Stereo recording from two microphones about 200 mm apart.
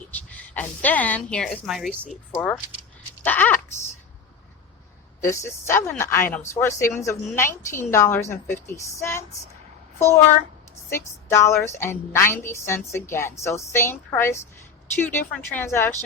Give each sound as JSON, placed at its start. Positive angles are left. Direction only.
{"t": 0.3, "sound": "a woman's voice", "side_deg": 10}
{"t": 5.2, "sound": "a woman's voice", "side_deg": 15}